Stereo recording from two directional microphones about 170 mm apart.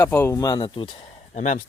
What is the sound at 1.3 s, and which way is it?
Speech, 45° left (ahead or behind).